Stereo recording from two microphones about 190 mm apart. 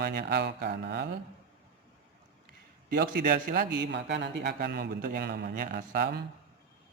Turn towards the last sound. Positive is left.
turn(degrees=-60)  # may be behind; listen again after turning